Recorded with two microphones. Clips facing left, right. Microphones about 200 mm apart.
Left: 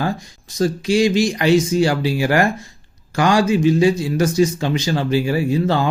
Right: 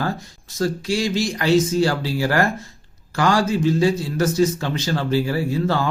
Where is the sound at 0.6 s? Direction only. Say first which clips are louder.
Left 5 dB; 15° left (ahead or behind).